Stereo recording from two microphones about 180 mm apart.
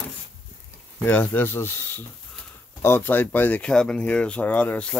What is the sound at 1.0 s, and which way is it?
Speech, 10° left (ahead or behind).